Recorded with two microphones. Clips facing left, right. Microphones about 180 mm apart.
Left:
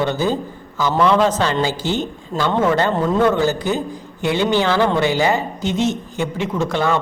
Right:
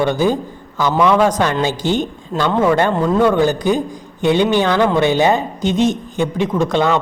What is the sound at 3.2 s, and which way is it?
A woman's voice, 15° right (ahead or behind).